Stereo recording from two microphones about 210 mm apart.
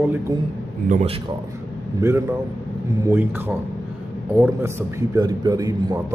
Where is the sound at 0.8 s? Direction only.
35° right (ahead or behind).